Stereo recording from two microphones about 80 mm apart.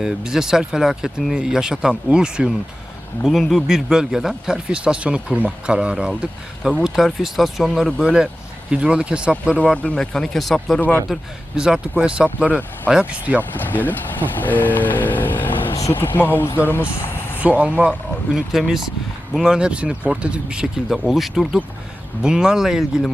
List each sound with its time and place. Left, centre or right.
0.0 s speech: centre
8.0 s speech: centre
9.6 s speech: centre
10.8 s speech: left
11.5 s speech: centre
12.5 s speech: centre
12.9 s speech: centre
13.5 s speech: left
14.4 s vehicle: left
15.9 s speech: left
17.3 s speech: centre
18.3 s speech: centre
20.9 s speech: centre